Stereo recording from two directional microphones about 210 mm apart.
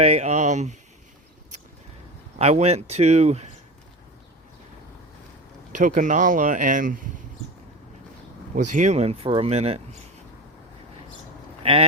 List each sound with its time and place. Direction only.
0.0 s speech: 30° right (ahead or behind)
2.4 s speech: 30° right (ahead or behind)
5.8 s speech: 40° right (ahead or behind)
8.5 s speech: 35° right (ahead or behind)
11.6 s speech: 25° right (ahead or behind)